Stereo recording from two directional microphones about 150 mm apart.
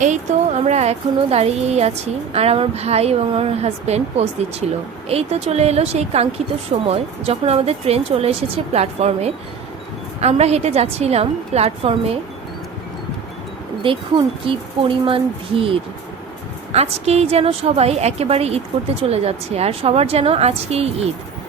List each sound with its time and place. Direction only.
0.0 s speech: 50° right (ahead or behind)
13.8 s speech: 35° right (ahead or behind)